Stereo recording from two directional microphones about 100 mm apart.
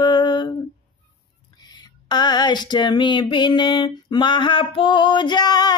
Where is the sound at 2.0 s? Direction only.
45° left (ahead or behind).